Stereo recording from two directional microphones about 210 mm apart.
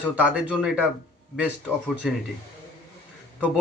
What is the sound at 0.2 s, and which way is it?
Speech, 5° right (ahead or behind).